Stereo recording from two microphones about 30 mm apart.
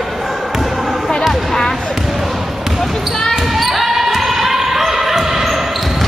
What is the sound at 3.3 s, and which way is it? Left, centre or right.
Basketball bounce, centre.